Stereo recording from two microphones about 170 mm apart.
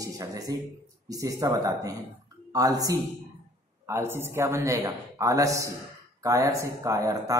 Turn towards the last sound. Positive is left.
turn(degrees=-20)  # may be behind; listen again after turning